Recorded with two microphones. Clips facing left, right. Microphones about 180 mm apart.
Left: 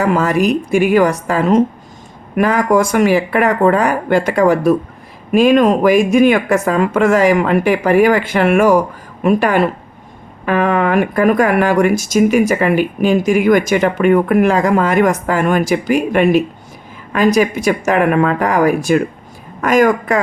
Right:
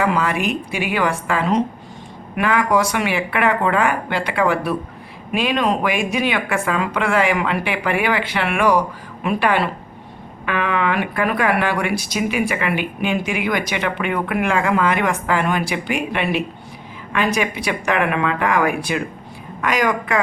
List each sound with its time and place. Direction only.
0.0 s speech: 40° left (ahead or behind)